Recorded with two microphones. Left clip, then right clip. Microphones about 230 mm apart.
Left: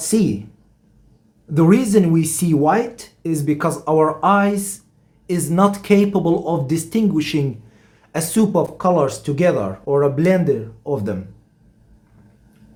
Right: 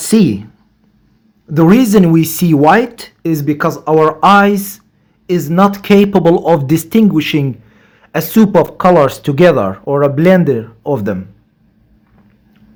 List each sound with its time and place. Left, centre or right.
0.0 s a woman's voice: right
1.5 s speech: right
5.2 s speech: centre